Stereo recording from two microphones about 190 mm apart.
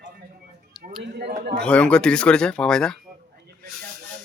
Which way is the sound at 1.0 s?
60° right (ahead or behind).